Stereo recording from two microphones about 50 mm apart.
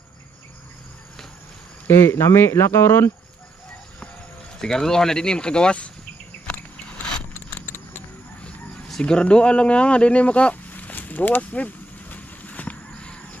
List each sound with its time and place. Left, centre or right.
1.9 s speech: left
4.6 s speech: centre
9.0 s a sound: centre